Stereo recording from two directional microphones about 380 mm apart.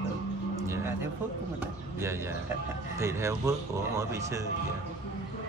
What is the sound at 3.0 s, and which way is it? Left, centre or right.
Speech, centre.